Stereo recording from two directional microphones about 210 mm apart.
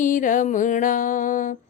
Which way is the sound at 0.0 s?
40° left (ahead or behind).